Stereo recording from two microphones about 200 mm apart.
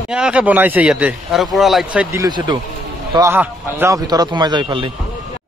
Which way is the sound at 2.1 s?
20° right (ahead or behind).